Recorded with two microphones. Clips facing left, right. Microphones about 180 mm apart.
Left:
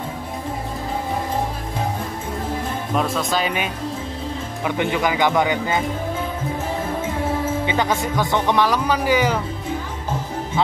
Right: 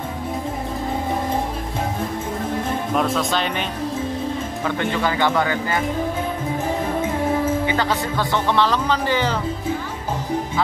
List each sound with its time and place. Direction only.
3.0 s speech: centre (ahead or behind)
4.6 s speech: 15° left (ahead or behind)
7.6 s music: 20° left (ahead or behind)
8.2 s speech: 15° left (ahead or behind)